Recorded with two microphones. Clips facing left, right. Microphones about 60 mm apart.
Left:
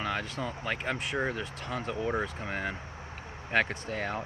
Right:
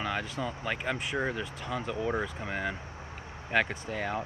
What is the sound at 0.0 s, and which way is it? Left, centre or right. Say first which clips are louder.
Vehicle: even; right.